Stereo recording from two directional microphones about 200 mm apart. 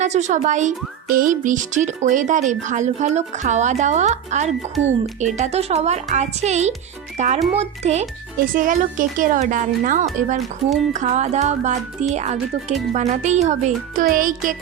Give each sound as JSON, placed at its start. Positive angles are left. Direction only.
{"t": 0.0, "sound": "speech", "side_deg": -35}